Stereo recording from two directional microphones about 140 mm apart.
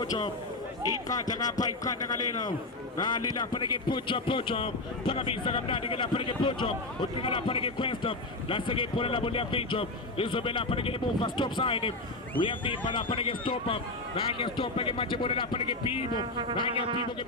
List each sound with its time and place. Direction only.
0.0 s a man's voice: 35° left (ahead or behind)